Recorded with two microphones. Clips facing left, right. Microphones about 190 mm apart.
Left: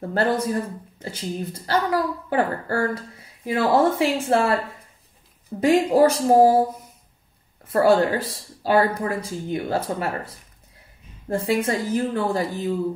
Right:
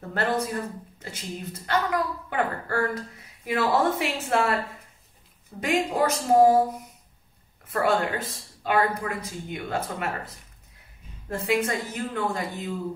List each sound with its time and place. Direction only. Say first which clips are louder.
0.1 s speech: left 4 dB; 30° left (ahead or behind)
5.7 s speech: left 8 dB; 30° left (ahead or behind)
7.6 s speech: left 7 dB; 30° left (ahead or behind)